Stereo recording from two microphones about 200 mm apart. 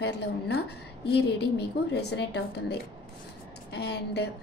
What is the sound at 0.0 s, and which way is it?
Speech, 55° left (ahead or behind).